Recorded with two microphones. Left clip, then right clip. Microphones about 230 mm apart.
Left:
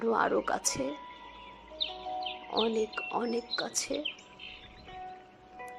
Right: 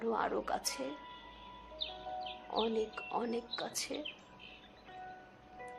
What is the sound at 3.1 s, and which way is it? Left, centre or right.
Speech, centre.